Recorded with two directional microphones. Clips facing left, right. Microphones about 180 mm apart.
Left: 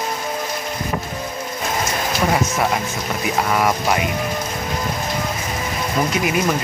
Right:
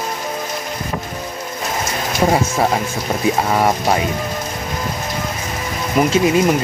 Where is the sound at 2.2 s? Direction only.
25° right (ahead or behind).